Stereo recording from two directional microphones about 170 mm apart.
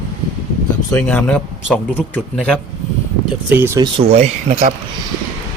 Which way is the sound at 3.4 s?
10° right (ahead or behind).